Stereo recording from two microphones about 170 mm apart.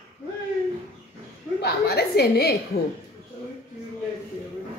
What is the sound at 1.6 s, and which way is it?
A woman's voice, 70° left (ahead or behind).